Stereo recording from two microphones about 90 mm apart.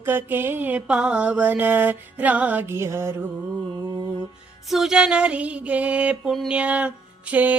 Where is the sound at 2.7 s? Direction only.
30° right (ahead or behind).